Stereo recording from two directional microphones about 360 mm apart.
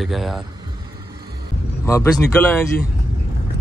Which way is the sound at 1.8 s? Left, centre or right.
Centre.